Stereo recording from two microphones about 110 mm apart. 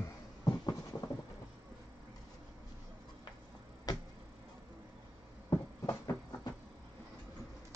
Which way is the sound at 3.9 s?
35° left (ahead or behind).